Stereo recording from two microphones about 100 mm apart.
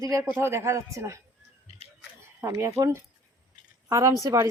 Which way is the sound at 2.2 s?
30° right (ahead or behind).